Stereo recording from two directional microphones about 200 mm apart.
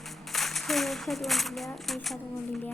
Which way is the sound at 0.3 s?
Centre (ahead or behind).